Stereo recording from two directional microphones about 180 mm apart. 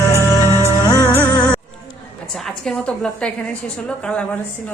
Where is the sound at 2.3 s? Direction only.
5° left (ahead or behind).